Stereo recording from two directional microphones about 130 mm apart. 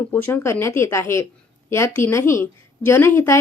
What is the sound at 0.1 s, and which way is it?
A woman's voice, 15° left (ahead or behind).